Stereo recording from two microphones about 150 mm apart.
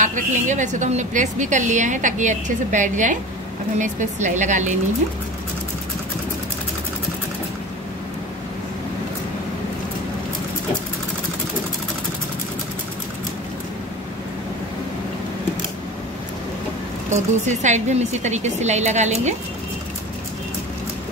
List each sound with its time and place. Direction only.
0.0 s a woman's voice: 55° right (ahead or behind)
17.1 s a woman's voice: 50° right (ahead or behind)